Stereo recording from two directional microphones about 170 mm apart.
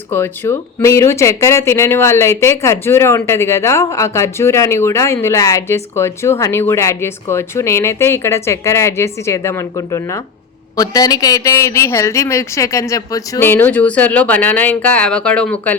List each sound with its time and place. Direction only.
0.1 s speech: 15° left (ahead or behind)